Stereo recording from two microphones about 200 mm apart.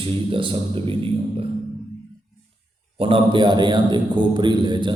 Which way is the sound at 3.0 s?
25° right (ahead or behind).